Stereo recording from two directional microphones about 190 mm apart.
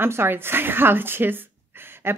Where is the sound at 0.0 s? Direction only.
10° right (ahead or behind).